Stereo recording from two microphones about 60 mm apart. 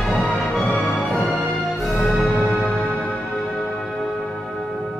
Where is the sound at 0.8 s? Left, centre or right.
Centre.